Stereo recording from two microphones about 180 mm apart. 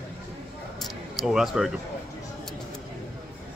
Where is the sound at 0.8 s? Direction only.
Centre (ahead or behind).